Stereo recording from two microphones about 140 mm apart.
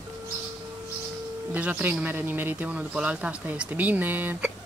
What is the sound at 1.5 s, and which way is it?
Speech, 10° right (ahead or behind).